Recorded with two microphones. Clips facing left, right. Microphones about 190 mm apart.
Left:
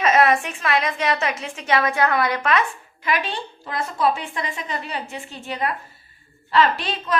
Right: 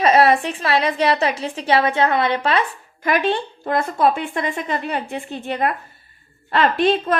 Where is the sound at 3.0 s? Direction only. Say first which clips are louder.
Right 6 dB; 50° right (ahead or behind).